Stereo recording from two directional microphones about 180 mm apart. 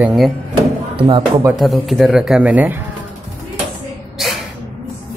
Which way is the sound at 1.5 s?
Centre (ahead or behind).